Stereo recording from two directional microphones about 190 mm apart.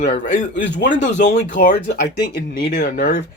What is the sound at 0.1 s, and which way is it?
Speech, 40° left (ahead or behind).